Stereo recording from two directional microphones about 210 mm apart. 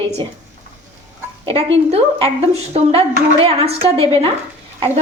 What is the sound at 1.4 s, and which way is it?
A woman's voice, 25° right (ahead or behind).